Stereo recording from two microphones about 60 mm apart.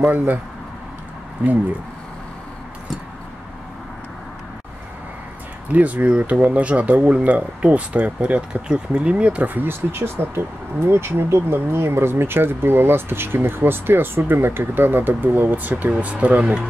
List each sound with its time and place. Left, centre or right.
0.0 s speech: right
1.4 s speech: right
5.7 s speech: right
9.5 s speech: right